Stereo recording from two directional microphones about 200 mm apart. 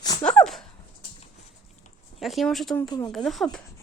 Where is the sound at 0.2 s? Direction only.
5° left (ahead or behind).